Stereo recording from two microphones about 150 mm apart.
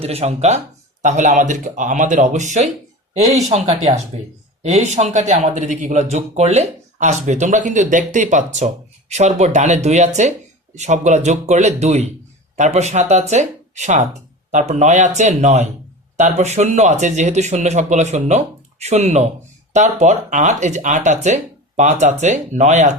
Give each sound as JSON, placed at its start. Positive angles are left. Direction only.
{"t": 0.0, "sound": "speech", "side_deg": -45}